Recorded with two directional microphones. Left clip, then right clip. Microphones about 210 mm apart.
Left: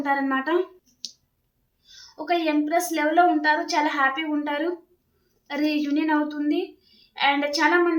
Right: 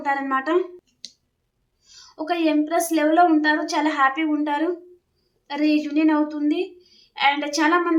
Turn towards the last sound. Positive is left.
turn(degrees=-15)  # may be behind; listen again after turning